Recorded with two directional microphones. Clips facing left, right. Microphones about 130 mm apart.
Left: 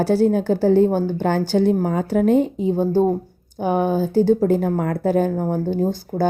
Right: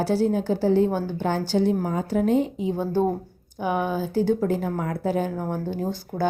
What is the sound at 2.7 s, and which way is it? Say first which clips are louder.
Speech: left 6 dB; 30° left (ahead or behind).